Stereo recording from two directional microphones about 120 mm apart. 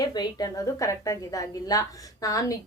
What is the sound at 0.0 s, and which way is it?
A woman's voice, 35° left (ahead or behind).